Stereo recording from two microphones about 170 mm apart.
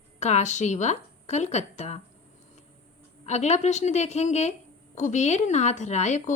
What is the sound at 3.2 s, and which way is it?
A woman's voice, 40° left (ahead or behind).